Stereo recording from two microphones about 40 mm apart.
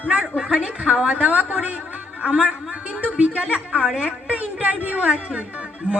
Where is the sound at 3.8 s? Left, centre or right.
Right.